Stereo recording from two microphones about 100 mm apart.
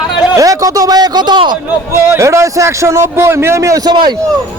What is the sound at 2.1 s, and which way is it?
A man's voice, 30° right (ahead or behind).